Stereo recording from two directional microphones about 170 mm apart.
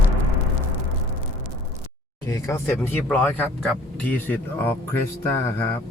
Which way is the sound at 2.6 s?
5° left (ahead or behind).